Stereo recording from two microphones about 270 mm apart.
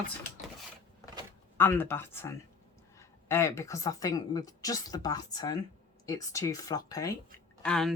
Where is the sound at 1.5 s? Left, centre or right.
Centre.